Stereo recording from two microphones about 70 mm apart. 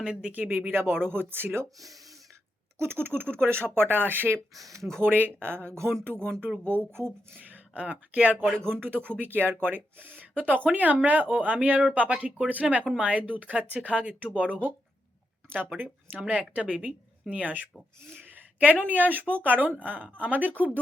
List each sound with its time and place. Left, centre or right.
0.0 s speech: centre
0.3 s speech: right
2.7 s speech: right
4.5 s speech: right
4.9 s speech: right
7.3 s speech: right
8.5 s speech: right
16.1 s speech: centre